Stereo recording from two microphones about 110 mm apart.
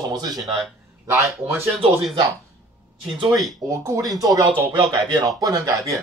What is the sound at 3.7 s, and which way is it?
Speech, 30° right (ahead or behind).